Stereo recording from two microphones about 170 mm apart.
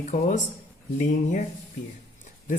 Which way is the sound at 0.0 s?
45° left (ahead or behind).